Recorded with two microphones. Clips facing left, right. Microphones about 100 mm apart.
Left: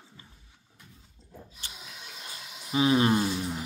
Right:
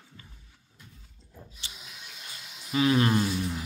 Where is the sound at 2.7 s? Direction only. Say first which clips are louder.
Left 1 dB; 20° left (ahead or behind).